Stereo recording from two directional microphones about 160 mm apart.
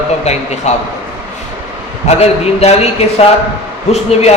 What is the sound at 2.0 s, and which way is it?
A man's voice, 40° left (ahead or behind).